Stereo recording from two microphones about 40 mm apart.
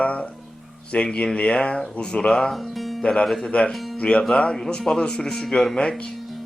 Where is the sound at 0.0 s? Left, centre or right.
Left.